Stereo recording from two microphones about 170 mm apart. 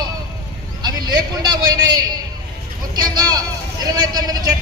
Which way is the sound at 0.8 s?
25° right (ahead or behind).